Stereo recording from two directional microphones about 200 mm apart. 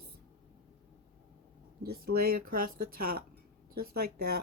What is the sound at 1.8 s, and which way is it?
A woman's voice, 50° right (ahead or behind).